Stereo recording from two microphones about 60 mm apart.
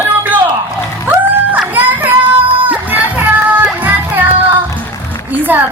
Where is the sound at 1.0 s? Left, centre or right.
Right.